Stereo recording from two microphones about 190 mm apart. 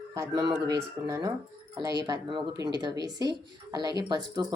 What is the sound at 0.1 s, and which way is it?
A man's voice, 20° right (ahead or behind).